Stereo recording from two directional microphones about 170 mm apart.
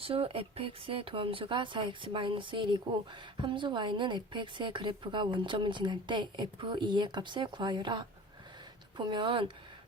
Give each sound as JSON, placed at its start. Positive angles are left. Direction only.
{"t": 0.0, "sound": "a woman's voice", "side_deg": -35}